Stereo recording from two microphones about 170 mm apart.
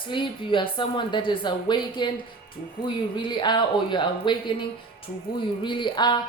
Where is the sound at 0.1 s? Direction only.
30° left (ahead or behind).